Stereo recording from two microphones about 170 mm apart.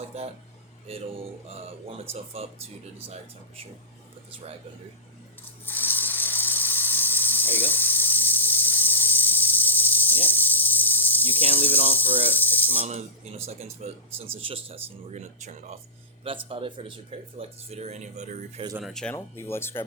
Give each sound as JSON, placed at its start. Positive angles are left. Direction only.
{"t": 0.1, "sound": "speech", "side_deg": -40}
{"t": 2.1, "sound": "speech", "side_deg": -35}
{"t": 5.6, "sound": "a sound", "side_deg": 10}
{"t": 11.5, "sound": "speech", "side_deg": 10}
{"t": 12.8, "sound": "speech", "side_deg": -35}
{"t": 16.5, "sound": "speech", "side_deg": -30}
{"t": 18.8, "sound": "speech", "side_deg": 0}
{"t": 19.1, "sound": "speech", "side_deg": 15}